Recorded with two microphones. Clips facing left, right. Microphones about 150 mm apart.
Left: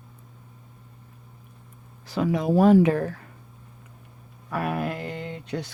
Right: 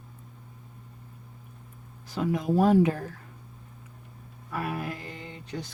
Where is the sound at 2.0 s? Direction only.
85° left.